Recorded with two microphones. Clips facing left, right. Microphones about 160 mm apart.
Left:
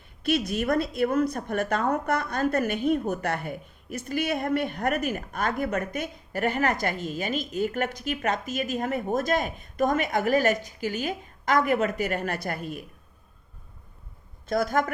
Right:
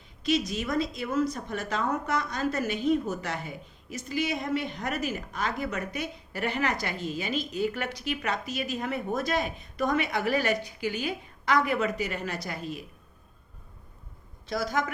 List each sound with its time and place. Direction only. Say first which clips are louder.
0.2 s a woman's voice: left 2 dB; 60° left (ahead or behind)
14.4 s a man's voice: left 5 dB; 55° left (ahead or behind)